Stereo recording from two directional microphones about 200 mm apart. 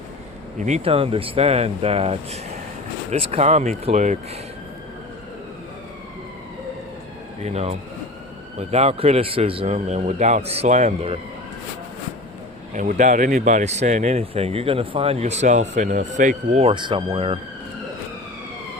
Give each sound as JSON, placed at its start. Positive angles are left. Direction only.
{"t": 0.6, "sound": "speech", "side_deg": -35}
{"t": 7.4, "sound": "speech", "side_deg": -30}
{"t": 12.7, "sound": "speech", "side_deg": -40}